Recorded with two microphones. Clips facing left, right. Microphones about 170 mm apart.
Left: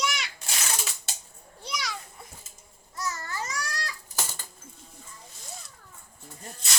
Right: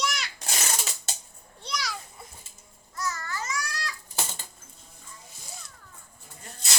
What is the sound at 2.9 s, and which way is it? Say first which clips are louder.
Babbling: even; 25° left (ahead or behind).